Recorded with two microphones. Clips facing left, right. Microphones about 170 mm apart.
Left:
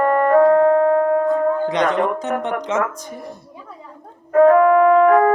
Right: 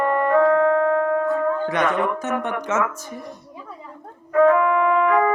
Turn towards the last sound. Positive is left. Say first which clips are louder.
# left 6 dB
turn(degrees=45)  # may be behind; listen again after turning